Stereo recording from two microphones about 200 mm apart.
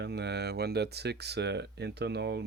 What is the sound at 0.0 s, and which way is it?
Speech, 55° right (ahead or behind).